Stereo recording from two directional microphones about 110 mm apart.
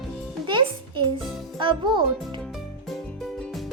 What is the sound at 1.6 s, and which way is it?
Speech, 45° right (ahead or behind).